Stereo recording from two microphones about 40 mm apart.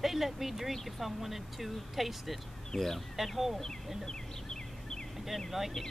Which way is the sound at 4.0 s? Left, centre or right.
Centre.